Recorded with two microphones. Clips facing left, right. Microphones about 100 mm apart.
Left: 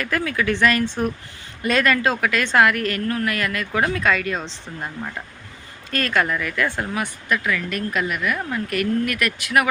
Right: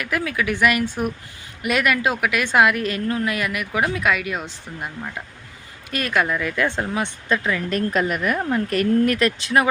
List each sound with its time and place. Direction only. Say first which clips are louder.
0.0 s a woman's voice: left 1 dB; 10° right (ahead or behind)
5.9 s speech: even; 15° right (ahead or behind)
7.8 s a woman's voice: right 3 dB; 40° right (ahead or behind)